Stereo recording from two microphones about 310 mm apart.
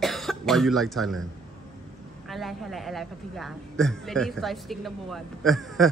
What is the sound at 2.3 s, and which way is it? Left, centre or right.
A woman's voice, centre.